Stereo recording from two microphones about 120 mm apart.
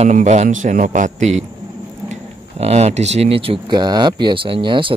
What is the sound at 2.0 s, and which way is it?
Speech, 60° right (ahead or behind).